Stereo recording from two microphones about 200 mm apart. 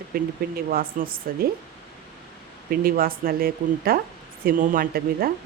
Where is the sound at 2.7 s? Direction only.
45° right (ahead or behind).